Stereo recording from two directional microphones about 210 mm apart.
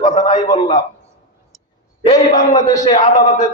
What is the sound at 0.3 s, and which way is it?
Speech, 20° left (ahead or behind).